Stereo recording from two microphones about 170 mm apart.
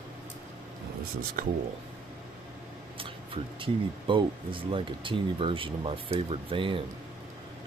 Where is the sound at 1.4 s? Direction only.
55° right (ahead or behind).